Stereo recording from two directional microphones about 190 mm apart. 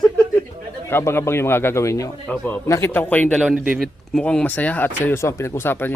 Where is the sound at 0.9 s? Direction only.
10° left (ahead or behind).